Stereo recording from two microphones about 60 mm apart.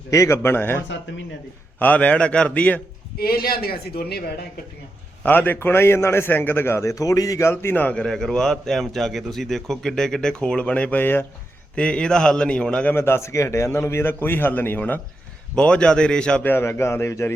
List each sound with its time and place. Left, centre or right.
0.1 s a man's voice: left
0.4 s a man's voice: left
1.8 s a man's voice: left
5.2 s a man's voice: left
6.9 s speech: left
7.5 s a man's voice: left
8.0 s a man's voice: centre
10.6 s a man's voice: left
11.0 s a man's voice: left
11.7 s a man's voice: centre
12.9 s a man's voice: left
15.5 s a man's voice: centre
16.4 s a man's voice: left